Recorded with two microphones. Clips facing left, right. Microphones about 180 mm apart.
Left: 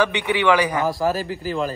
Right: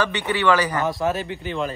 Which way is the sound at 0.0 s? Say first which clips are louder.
Left 2 dB; 10° left (ahead or behind).